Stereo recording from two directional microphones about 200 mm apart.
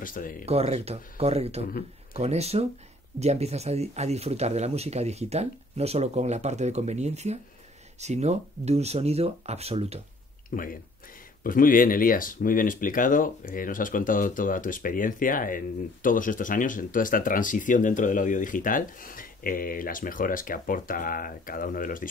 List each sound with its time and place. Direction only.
0.0 s speech: 45° left (ahead or behind)
0.5 s speech: 30° right (ahead or behind)
10.5 s speech: 45° left (ahead or behind)